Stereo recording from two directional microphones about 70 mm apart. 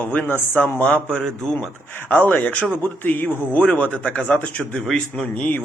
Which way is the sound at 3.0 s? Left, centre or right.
Left.